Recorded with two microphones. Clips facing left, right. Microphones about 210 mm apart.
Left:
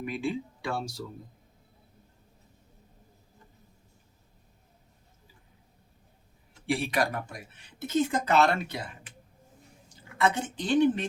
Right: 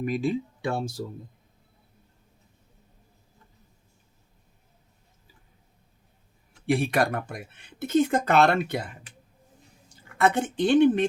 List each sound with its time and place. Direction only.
0.0 s speech: 40° right (ahead or behind)
6.7 s speech: 50° right (ahead or behind)
10.2 s speech: 55° right (ahead or behind)